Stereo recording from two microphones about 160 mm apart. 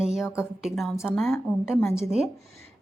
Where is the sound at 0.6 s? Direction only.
Centre (ahead or behind).